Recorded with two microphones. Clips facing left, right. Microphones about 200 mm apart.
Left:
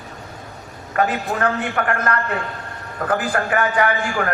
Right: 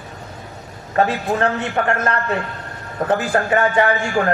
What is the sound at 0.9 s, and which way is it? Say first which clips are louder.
A man's voice: right 2 dB; 25° right (ahead or behind).